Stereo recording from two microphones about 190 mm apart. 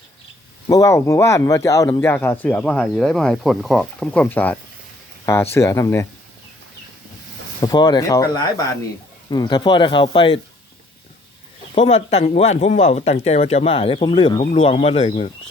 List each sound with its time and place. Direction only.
0.7 s speech: 15° left (ahead or behind)
7.6 s speech: 20° left (ahead or behind)
11.7 s speech: 35° left (ahead or behind)